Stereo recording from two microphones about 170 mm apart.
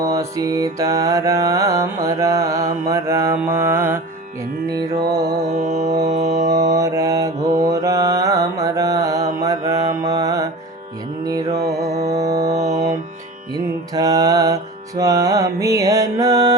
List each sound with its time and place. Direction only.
0.0 s mantra: 20° right (ahead or behind)
5.5 s mantra: 45° right (ahead or behind)
6.1 s music: 45° right (ahead or behind)
6.5 s mantra: 20° right (ahead or behind)
11.3 s music: 20° right (ahead or behind)
11.9 s music: 40° right (ahead or behind)
12.1 s mantra: 20° right (ahead or behind)
12.7 s music: 20° right (ahead or behind)